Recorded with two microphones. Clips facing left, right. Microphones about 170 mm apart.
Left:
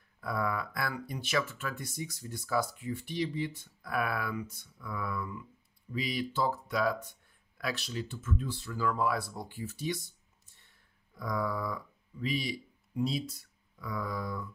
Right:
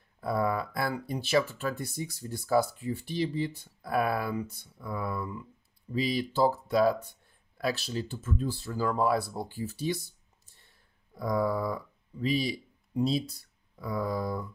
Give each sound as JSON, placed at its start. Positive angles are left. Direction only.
{"t": 0.2, "sound": "speech", "side_deg": -30}